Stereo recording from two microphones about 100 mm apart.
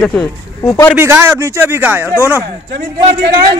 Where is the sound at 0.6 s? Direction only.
30° left (ahead or behind).